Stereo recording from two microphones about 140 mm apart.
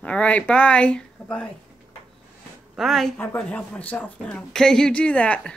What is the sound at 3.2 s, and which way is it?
Speech, 10° left (ahead or behind).